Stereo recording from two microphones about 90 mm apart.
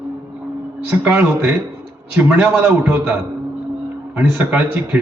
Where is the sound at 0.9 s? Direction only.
25° right (ahead or behind).